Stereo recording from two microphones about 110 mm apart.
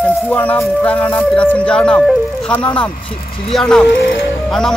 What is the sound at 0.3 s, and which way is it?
Speech, 15° left (ahead or behind).